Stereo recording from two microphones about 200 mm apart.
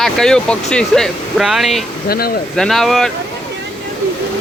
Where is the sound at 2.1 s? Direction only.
50° left (ahead or behind).